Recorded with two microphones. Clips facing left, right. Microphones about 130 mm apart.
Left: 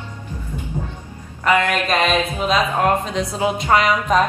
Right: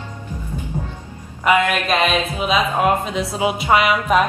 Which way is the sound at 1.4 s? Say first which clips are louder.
Right 1 dB; 15° right (ahead or behind).